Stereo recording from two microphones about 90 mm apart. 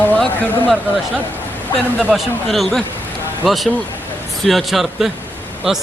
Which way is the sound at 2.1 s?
Centre (ahead or behind).